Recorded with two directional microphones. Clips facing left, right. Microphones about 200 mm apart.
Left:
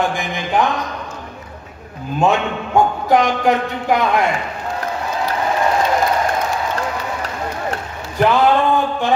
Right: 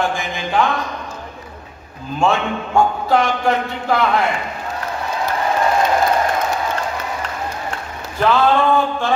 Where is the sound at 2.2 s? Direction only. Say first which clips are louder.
Left 1 dB; 15° left (ahead or behind).